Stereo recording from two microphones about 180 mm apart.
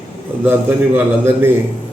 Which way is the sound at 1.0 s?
10° right (ahead or behind).